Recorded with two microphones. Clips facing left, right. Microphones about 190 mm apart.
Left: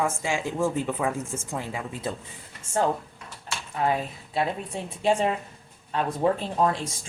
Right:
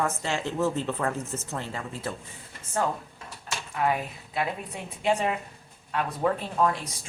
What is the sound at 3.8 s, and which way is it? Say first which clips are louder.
Speech: left 1 dB; 30° left (ahead or behind).